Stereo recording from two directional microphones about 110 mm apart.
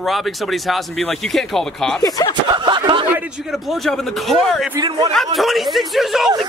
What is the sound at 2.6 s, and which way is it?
Speech, 45° right (ahead or behind).